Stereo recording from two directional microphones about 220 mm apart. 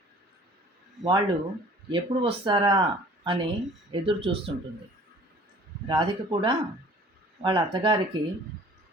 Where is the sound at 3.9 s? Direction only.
25° right (ahead or behind).